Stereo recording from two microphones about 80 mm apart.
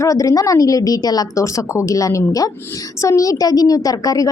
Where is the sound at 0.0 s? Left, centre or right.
Left.